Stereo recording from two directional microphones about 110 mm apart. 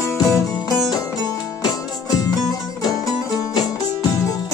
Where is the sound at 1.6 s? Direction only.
35° left (ahead or behind).